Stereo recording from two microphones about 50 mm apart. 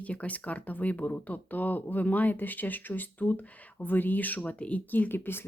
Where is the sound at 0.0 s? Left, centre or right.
Left.